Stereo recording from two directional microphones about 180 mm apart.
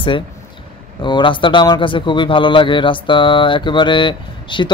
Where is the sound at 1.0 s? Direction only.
25° left (ahead or behind).